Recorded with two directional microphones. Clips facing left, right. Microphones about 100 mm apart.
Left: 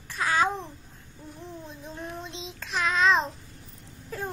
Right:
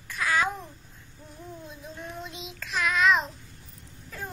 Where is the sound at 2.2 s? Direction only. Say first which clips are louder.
Left 1 dB; 25° left (ahead or behind).